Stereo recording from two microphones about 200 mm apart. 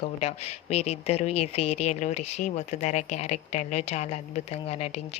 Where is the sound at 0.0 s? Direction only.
30° left (ahead or behind).